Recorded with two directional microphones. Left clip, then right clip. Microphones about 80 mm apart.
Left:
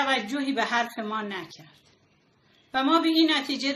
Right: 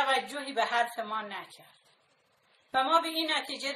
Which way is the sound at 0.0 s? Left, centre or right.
Right.